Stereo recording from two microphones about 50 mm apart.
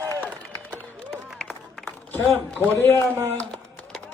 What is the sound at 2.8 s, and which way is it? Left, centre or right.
Speech, left.